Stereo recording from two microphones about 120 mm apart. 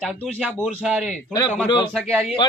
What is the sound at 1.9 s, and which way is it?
Speech, 5° left (ahead or behind).